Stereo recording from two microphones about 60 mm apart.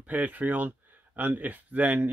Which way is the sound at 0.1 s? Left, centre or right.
Right.